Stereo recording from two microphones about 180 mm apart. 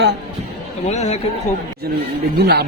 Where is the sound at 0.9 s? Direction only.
40° left (ahead or behind).